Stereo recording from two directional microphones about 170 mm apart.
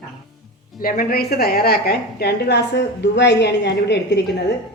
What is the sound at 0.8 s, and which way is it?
A woman's voice, 55° left (ahead or behind).